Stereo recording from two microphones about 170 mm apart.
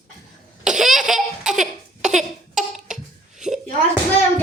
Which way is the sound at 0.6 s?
5° right (ahead or behind).